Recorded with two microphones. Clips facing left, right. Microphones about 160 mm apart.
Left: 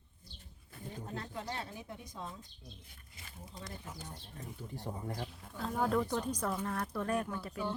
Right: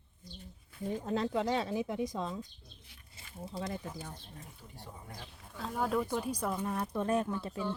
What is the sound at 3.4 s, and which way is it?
Speech, 75° right (ahead or behind).